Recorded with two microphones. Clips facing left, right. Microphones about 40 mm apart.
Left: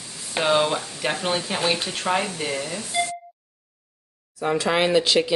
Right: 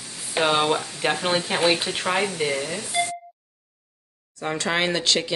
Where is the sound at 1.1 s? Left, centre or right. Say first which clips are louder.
Right 1 dB; right; by 3.1 s centre.